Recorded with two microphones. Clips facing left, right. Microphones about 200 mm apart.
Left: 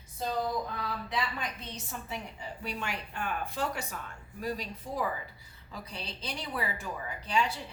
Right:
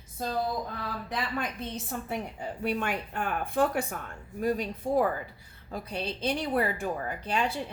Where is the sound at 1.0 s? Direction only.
50° right (ahead or behind).